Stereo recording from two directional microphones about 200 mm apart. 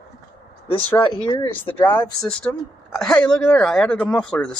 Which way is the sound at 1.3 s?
25° left (ahead or behind).